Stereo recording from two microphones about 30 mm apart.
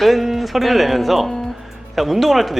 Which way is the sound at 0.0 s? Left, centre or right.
Centre.